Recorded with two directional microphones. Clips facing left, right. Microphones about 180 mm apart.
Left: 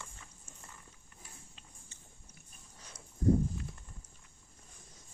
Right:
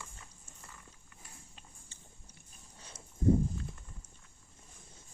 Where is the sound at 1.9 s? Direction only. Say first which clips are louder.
Right 1 dB; 30° right (ahead or behind).